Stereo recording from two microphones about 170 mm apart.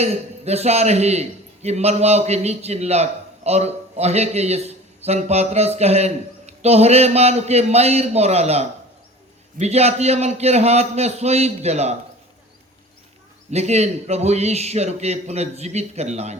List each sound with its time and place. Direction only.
0.0 s a man's voice: 40° right (ahead or behind)
13.5 s a man's voice: 40° right (ahead or behind)